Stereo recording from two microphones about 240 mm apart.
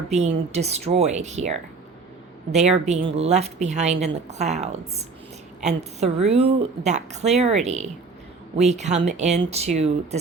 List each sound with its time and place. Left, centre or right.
0.5 s a woman's voice: right